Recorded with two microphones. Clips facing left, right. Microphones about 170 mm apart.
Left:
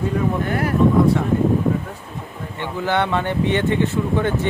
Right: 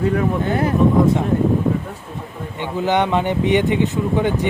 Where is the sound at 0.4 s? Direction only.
20° right (ahead or behind).